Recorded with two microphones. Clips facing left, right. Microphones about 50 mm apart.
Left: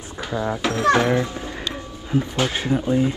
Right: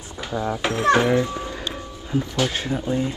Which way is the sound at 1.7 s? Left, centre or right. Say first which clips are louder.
Left 4 dB; centre.